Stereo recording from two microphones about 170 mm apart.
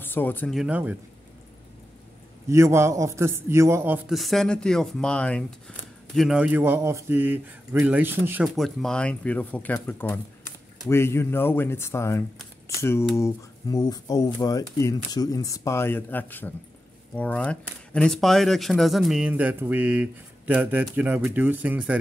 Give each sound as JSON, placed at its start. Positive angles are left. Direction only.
{"t": 0.0, "sound": "speech", "side_deg": 10}
{"t": 0.6, "sound": "a man's voice", "side_deg": -10}
{"t": 2.4, "sound": "a man's voice", "side_deg": -15}
{"t": 4.1, "sound": "a man's voice", "side_deg": 0}
{"t": 8.5, "sound": "a man's voice", "side_deg": 0}